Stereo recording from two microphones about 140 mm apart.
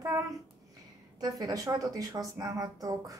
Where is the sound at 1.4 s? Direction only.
25° right (ahead or behind).